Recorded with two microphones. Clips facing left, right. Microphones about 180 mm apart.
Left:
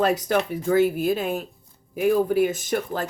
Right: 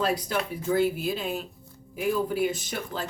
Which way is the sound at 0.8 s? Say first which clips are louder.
Left 5 dB; 50° left (ahead or behind).